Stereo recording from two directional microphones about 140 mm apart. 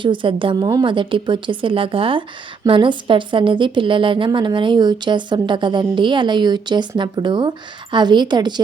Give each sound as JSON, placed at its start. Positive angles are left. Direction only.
{"t": 0.0, "sound": "a woman's voice", "side_deg": -35}